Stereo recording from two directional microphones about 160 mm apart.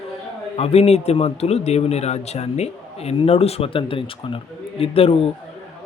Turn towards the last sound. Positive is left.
turn(degrees=35)  # may be behind; listen again after turning